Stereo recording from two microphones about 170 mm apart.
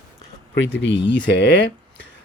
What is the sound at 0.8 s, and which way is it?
Speech, 90° left.